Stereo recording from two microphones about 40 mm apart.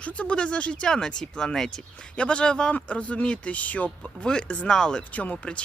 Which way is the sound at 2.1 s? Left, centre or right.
Left.